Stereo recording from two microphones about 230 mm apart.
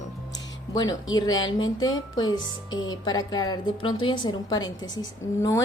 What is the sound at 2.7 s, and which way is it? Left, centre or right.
Speech, left.